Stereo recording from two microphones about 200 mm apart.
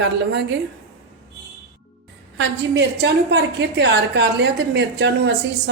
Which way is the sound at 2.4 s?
60° right (ahead or behind).